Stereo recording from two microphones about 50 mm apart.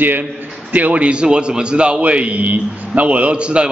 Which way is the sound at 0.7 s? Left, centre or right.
Right.